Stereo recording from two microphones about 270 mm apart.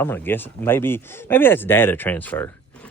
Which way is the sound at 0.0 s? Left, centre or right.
Centre.